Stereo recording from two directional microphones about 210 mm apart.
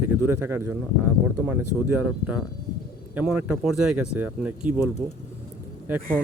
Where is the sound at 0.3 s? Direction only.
10° right (ahead or behind).